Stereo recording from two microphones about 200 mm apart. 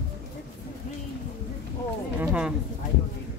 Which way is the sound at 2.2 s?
5° right (ahead or behind).